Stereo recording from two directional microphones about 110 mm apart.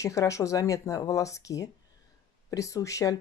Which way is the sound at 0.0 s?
30° left (ahead or behind).